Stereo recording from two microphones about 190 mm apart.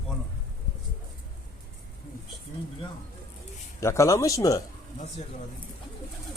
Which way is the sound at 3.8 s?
15° left (ahead or behind).